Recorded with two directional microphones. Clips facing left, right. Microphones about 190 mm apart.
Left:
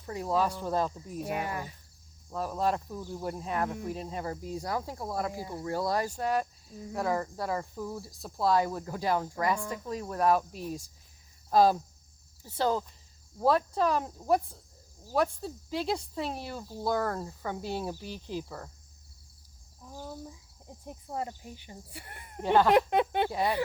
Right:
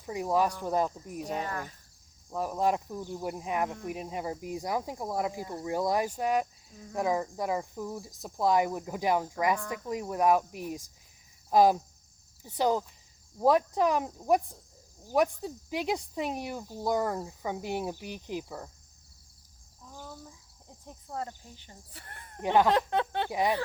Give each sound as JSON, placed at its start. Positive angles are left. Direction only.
{"t": 0.0, "sound": "speech", "side_deg": -15}
{"t": 1.3, "sound": "speech", "side_deg": 10}
{"t": 2.3, "sound": "speech", "side_deg": -15}
{"t": 20.8, "sound": "speech", "side_deg": 15}
{"t": 22.4, "sound": "speech", "side_deg": -15}
{"t": 22.7, "sound": "speech", "side_deg": 15}
{"t": 23.3, "sound": "speech", "side_deg": -15}